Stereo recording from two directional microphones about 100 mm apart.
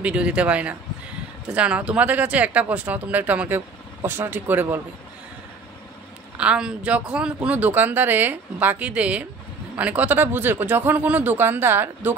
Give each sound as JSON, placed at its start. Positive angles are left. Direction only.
{"t": 0.0, "sound": "speech", "side_deg": -10}
{"t": 6.3, "sound": "speech", "side_deg": -10}